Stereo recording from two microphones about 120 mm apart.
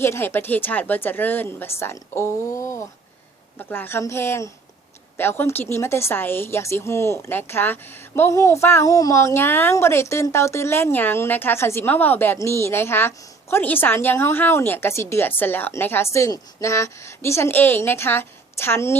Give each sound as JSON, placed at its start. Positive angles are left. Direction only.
{"t": 0.0, "sound": "a woman's voice", "side_deg": 20}